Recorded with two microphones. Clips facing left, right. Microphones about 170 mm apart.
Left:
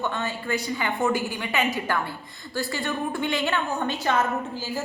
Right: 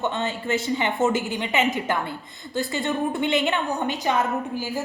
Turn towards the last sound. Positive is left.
turn(degrees=-15)  # may be behind; listen again after turning